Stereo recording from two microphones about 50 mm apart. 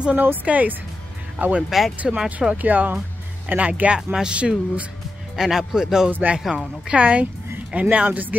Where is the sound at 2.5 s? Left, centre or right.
Right.